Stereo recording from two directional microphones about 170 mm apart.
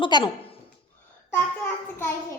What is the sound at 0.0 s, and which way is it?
Speech, 25° left (ahead or behind).